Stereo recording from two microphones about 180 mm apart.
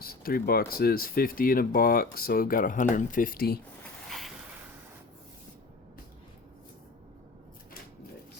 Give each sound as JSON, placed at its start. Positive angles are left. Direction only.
{"t": 0.0, "sound": "speech", "side_deg": 55}